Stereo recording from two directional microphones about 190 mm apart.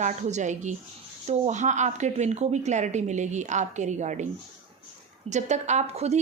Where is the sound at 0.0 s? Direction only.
40° right (ahead or behind).